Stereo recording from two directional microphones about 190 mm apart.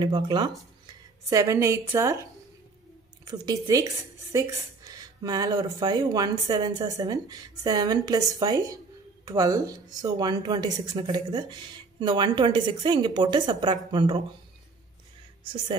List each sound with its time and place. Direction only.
0.0 s a woman's voice: 25° right (ahead or behind)
3.3 s a woman's voice: 20° right (ahead or behind)